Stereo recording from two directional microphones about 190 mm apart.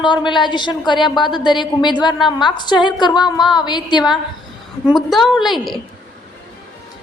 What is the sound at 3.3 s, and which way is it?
Speech, centre (ahead or behind).